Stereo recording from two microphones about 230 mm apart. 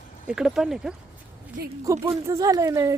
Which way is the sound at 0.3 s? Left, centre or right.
Centre.